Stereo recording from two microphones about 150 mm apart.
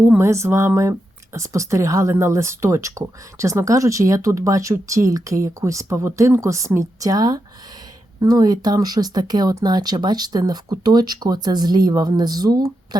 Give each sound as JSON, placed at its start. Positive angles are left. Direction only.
{"t": 0.0, "sound": "speech", "side_deg": -15}